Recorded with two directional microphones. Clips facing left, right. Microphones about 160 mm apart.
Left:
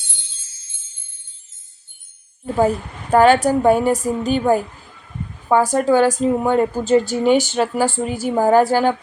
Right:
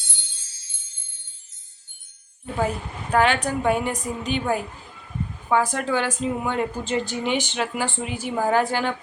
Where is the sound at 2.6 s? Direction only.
40° left (ahead or behind).